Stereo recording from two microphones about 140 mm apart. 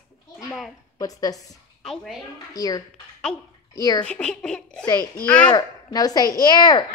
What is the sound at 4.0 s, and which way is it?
Speech, 10° left (ahead or behind).